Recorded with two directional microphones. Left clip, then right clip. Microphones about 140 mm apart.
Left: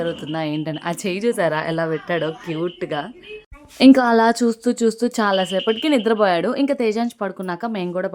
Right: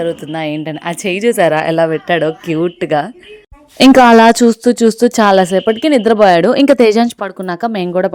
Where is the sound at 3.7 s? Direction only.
60° right (ahead or behind).